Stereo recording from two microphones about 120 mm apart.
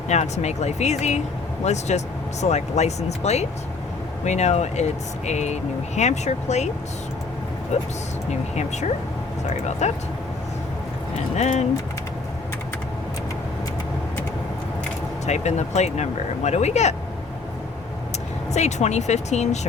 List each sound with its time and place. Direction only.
0.1 s speech: 70° left (ahead or behind)
7.7 s speech: 75° left (ahead or behind)
11.3 s speech: 75° left (ahead or behind)
15.3 s speech: 70° left (ahead or behind)
18.5 s speech: 70° left (ahead or behind)